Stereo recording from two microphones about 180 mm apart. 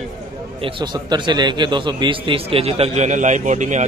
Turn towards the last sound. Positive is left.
turn(degrees=-45)  # may be behind; listen again after turning